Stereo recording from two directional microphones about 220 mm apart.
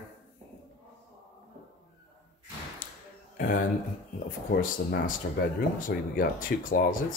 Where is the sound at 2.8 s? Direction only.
40° left (ahead or behind).